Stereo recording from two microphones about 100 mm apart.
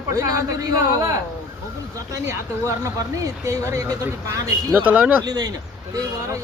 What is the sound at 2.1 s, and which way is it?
Speech, 35° right (ahead or behind).